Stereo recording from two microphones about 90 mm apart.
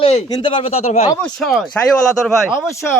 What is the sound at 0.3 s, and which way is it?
Speech, 50° left (ahead or behind).